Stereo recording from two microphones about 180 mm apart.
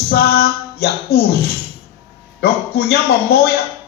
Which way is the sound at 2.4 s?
60° left (ahead or behind).